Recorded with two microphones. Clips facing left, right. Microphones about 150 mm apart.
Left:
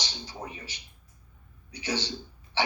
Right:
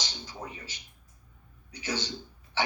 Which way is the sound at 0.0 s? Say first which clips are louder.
Left 1 dB; 15° left (ahead or behind).